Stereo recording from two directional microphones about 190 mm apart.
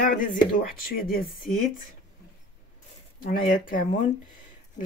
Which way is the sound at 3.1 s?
50° left (ahead or behind).